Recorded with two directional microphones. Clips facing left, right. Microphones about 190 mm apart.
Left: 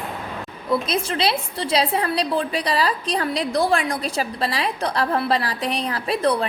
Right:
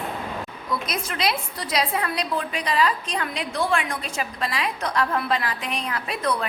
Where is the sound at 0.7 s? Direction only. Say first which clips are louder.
Left 7 dB; 30° left (ahead or behind).